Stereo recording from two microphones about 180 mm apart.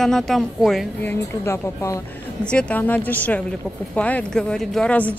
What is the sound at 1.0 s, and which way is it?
A woman's voice, 15° left (ahead or behind).